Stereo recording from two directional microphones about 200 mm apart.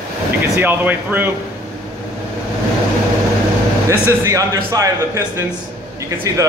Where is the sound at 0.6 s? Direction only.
10° right (ahead or behind).